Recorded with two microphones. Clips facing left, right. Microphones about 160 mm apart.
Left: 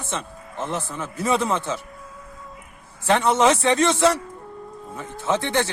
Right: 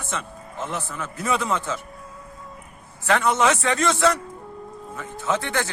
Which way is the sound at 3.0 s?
30° left (ahead or behind).